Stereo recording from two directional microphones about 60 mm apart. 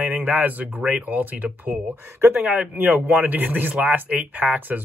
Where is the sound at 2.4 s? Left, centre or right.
Centre.